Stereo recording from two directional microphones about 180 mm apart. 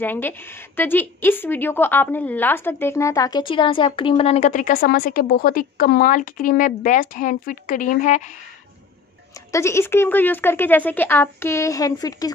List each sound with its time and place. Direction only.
0.0 s a woman's voice: 10° left (ahead or behind); by 8.2 s 45° left (ahead or behind)
9.5 s speech: 15° left (ahead or behind)